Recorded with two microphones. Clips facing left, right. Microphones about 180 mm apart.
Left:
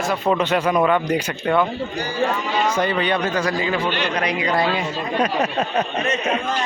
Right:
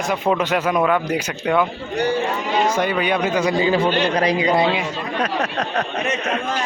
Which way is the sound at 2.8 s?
10° right (ahead or behind).